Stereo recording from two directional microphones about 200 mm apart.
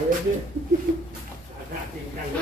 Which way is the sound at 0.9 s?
50° right (ahead or behind).